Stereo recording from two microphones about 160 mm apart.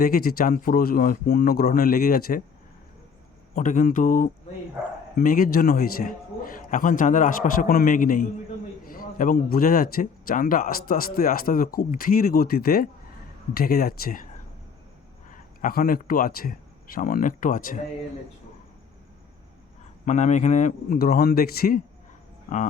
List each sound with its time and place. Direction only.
0.0 s a man's voice: 65° left (ahead or behind)
3.5 s a man's voice: 50° left (ahead or behind)
15.3 s speech: 60° left (ahead or behind)
20.1 s a man's voice: 50° left (ahead or behind); by 21.8 s 70° left (ahead or behind)